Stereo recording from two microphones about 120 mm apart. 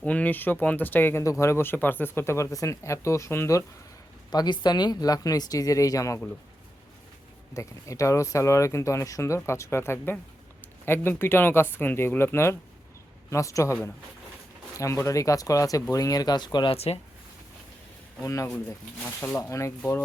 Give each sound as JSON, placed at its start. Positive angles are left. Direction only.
{"t": 0.0, "sound": "speech", "side_deg": 10}
{"t": 4.3, "sound": "speech", "side_deg": 35}
{"t": 7.5, "sound": "speech", "side_deg": 25}
{"t": 14.8, "sound": "speech", "side_deg": 25}
{"t": 16.7, "sound": "speech", "side_deg": 55}
{"t": 18.2, "sound": "speech", "side_deg": 25}